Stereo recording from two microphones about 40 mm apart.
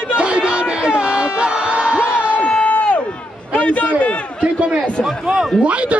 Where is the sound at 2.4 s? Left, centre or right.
Left.